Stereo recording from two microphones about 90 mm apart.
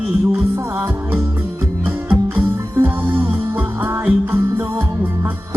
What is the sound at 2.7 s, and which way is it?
Music, 20° right (ahead or behind).